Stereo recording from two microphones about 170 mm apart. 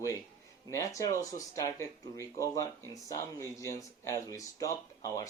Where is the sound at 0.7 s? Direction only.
20° left (ahead or behind).